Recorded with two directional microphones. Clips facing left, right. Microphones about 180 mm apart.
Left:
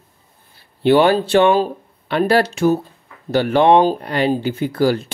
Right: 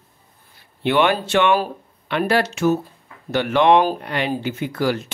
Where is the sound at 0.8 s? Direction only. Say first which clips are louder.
Left 5 dB; 35° left (ahead or behind).